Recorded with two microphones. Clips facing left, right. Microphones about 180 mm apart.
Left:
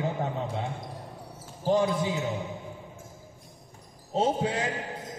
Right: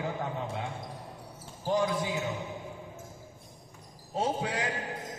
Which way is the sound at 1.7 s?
25° left (ahead or behind).